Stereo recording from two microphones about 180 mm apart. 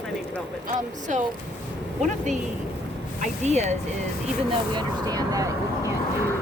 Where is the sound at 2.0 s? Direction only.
40° right (ahead or behind).